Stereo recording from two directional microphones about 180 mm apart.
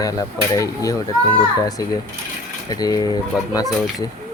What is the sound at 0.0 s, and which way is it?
Speech, 20° left (ahead or behind).